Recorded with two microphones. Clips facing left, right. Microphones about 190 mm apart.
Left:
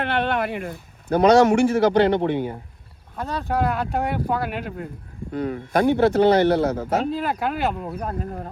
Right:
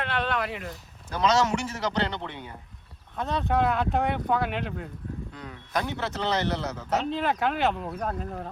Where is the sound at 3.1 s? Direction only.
Centre (ahead or behind).